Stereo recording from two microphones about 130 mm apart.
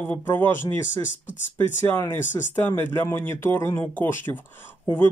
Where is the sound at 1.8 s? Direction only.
15° left (ahead or behind).